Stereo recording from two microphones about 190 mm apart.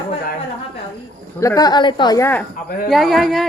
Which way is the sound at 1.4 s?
15° left (ahead or behind).